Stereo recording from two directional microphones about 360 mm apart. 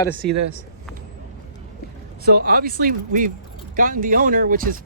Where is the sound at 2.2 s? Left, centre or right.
Right.